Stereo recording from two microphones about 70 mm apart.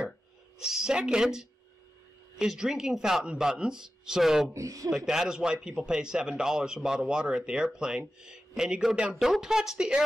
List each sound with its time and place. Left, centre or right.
0.6 s a man's voice: centre
4.6 s a man's voice: right
4.9 s a man's voice: centre